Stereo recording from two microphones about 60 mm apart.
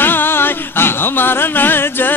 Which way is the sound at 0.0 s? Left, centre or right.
Left.